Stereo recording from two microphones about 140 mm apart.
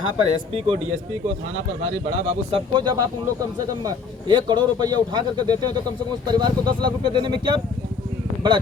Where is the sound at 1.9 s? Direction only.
50° right (ahead or behind).